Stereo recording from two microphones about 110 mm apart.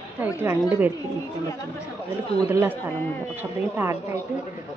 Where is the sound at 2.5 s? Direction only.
20° right (ahead or behind).